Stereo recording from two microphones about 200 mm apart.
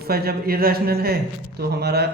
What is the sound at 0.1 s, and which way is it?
A man's voice, 50° right (ahead or behind).